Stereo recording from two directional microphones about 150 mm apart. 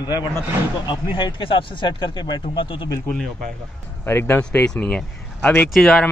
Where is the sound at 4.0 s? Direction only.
15° left (ahead or behind).